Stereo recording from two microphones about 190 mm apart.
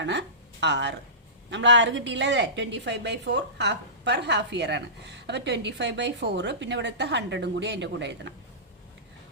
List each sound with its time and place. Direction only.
0.0 s a woman's voice: 65° right (ahead or behind)